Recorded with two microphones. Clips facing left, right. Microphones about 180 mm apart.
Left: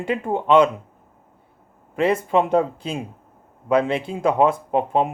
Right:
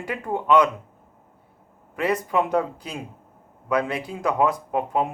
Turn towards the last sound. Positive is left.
turn(degrees=25)  # may be behind; listen again after turning